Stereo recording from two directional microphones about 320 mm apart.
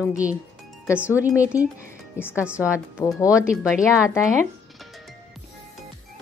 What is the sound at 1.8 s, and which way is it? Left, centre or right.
Music, centre.